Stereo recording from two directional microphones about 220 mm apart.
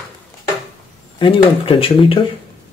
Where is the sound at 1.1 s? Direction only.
20° left (ahead or behind).